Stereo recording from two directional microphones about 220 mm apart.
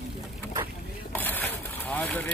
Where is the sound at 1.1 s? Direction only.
10° left (ahead or behind).